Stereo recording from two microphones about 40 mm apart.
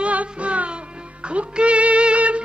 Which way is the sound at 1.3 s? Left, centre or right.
Right.